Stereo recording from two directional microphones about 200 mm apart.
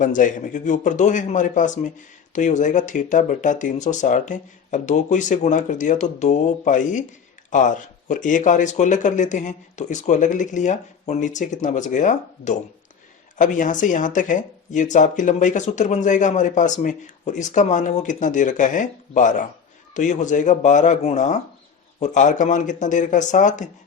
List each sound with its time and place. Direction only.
0.0 s speech: 40° left (ahead or behind)